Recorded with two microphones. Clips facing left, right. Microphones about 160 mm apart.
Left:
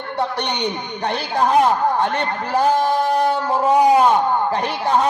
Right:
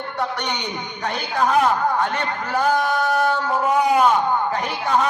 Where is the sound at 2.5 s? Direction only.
30° left (ahead or behind).